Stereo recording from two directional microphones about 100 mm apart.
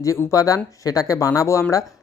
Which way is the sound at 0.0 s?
30° left (ahead or behind).